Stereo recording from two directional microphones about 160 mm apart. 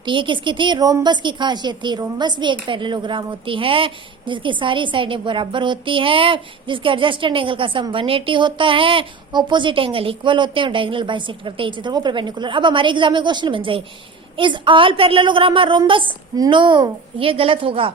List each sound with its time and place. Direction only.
0.0 s a woman's voice: 30° right (ahead or behind)